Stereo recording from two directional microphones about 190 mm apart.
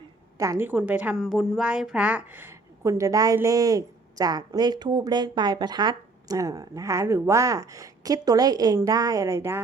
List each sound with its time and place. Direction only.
0.6 s a woman's voice: 10° right (ahead or behind)